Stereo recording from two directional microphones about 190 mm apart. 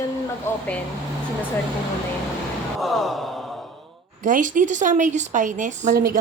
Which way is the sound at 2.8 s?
Centre (ahead or behind).